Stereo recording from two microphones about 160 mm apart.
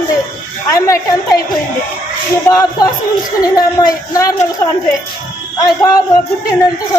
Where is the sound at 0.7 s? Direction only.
20° left (ahead or behind).